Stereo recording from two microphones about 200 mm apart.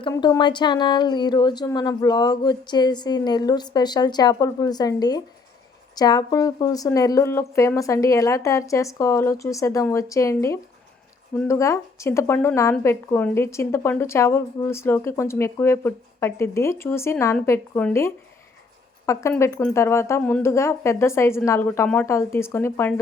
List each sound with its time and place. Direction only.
0.0 s a woman's voice: 20° left (ahead or behind)